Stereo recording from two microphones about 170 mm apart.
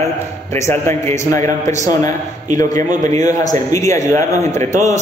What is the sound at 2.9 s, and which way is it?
Speech, 45° right (ahead or behind).